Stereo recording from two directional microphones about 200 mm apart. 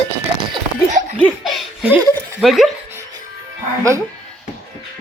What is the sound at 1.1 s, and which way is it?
Speech, centre (ahead or behind).